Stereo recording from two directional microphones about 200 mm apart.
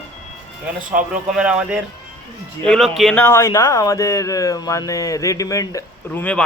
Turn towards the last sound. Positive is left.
turn(degrees=10)  # may be behind; listen again after turning